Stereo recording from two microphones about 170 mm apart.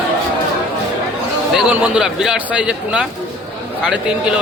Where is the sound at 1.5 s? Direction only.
5° right (ahead or behind).